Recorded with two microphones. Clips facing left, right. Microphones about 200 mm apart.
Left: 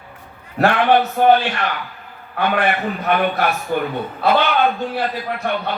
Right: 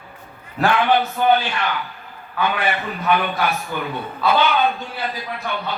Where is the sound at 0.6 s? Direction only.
65° left (ahead or behind).